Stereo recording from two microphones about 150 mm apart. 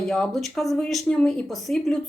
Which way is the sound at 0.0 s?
Centre (ahead or behind).